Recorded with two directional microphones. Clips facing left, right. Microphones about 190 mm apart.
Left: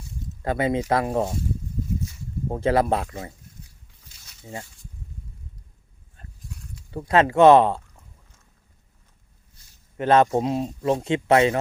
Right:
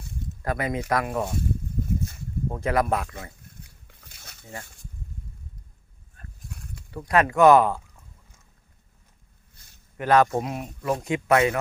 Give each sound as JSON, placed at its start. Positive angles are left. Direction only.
{"t": 0.4, "sound": "speech", "side_deg": 25}
{"t": 2.5, "sound": "speech", "side_deg": 30}
{"t": 3.6, "sound": "a sound", "side_deg": -60}
{"t": 6.5, "sound": "a sound", "side_deg": -55}
{"t": 6.9, "sound": "speech", "side_deg": 25}
{"t": 10.0, "sound": "speech", "side_deg": 25}